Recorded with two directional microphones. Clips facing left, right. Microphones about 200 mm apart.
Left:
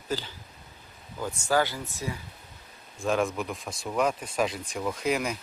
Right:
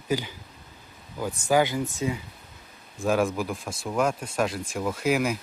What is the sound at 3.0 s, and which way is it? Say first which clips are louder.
Speech: right 3 dB; 5° right (ahead or behind).